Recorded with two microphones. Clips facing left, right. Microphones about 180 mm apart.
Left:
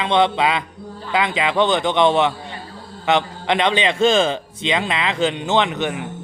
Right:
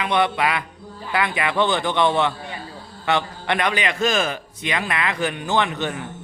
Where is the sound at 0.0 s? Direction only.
20° left (ahead or behind).